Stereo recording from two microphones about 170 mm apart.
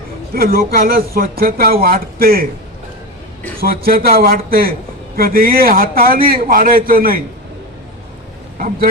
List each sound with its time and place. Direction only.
0.3 s speech: 60° right (ahead or behind)
3.6 s speech: 60° right (ahead or behind)
8.5 s speech: 55° right (ahead or behind)